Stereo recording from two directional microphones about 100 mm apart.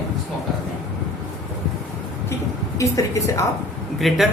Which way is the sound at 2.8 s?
30° left (ahead or behind).